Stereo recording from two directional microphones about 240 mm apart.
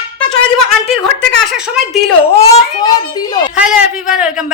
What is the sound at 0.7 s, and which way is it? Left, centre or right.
A woman's voice, centre.